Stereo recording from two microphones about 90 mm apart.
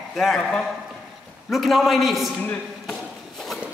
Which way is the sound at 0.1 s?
Centre (ahead or behind).